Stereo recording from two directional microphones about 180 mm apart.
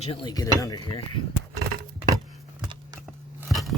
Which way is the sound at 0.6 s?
20° left (ahead or behind).